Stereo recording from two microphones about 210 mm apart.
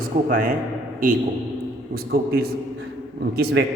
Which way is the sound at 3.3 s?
50° right (ahead or behind).